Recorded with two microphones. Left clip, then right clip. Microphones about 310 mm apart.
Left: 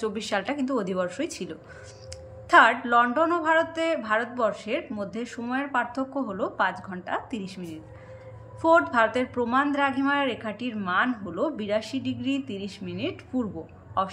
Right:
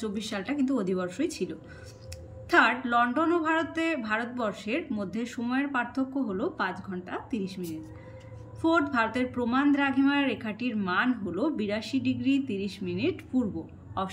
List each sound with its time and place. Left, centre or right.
0.0 s a woman's voice: centre
8.6 s a woman's voice: centre